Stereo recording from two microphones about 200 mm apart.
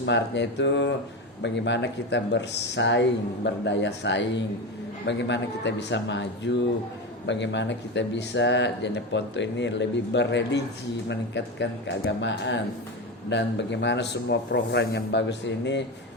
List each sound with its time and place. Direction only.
0.0 s speech: 60° left (ahead or behind)